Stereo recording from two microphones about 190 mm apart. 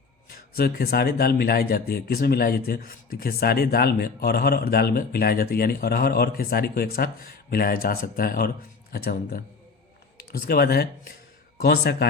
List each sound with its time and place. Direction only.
0.3 s speech: 55° left (ahead or behind)